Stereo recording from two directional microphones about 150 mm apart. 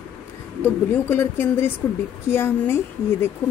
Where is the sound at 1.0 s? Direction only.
15° left (ahead or behind).